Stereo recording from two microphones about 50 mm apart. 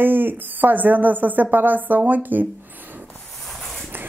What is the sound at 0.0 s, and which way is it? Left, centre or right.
Speech, right.